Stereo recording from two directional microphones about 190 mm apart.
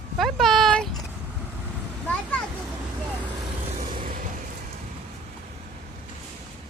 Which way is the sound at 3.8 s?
45° right (ahead or behind).